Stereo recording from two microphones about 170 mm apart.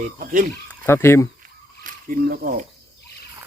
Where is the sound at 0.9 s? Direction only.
15° left (ahead or behind).